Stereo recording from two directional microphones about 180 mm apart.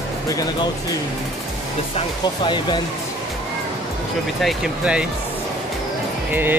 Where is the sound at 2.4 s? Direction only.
25° left (ahead or behind).